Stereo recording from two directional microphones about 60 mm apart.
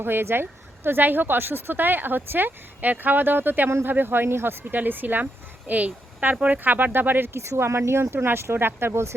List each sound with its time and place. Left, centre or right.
0.0 s speech: right
7.3 s speech: right